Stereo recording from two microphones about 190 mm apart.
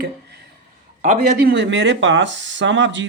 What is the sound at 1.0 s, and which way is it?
Speech, 50° right (ahead or behind).